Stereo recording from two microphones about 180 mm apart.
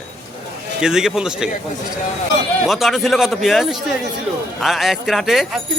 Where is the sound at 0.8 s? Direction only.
5° right (ahead or behind).